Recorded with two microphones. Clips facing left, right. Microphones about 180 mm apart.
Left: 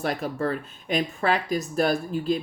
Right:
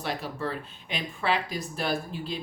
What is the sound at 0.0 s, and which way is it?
Speech, 50° left (ahead or behind).